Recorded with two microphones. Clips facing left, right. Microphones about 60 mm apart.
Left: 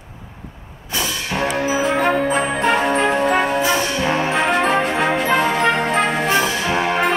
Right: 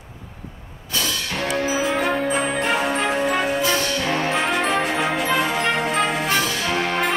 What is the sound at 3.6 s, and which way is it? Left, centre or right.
Music, left.